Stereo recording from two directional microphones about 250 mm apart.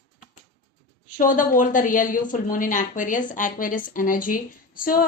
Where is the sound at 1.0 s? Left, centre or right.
Left.